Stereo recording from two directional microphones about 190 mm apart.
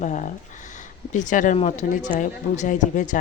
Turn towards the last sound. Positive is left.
turn(degrees=40)  # may be behind; listen again after turning